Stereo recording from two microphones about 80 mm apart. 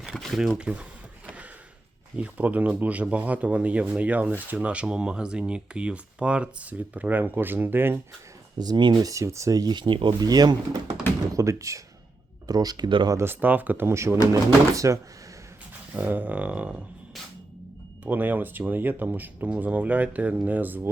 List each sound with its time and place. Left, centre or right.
0.0 s speech: centre
2.1 s speech: centre
8.5 s speech: right
9.7 s speech: right
10.2 s speech: right
11.3 s speech: right
12.5 s speech: right
13.2 s speech: right
15.9 s speech: right
18.0 s speech: right